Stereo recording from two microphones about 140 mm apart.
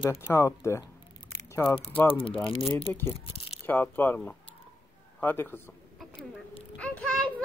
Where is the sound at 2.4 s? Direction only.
40° left (ahead or behind).